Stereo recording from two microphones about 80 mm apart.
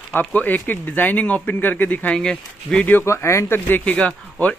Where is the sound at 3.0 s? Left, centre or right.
Left; by 4.5 s centre.